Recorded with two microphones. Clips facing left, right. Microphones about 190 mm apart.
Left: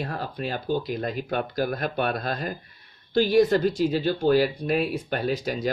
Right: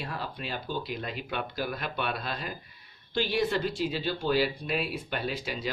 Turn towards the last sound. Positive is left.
turn(degrees=45)  # may be behind; listen again after turning